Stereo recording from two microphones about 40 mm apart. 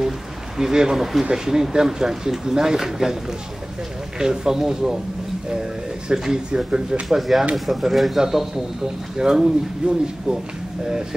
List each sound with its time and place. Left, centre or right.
0.6 s speech: centre
4.2 s speech: centre
6.1 s speech: centre
7.1 s speech: centre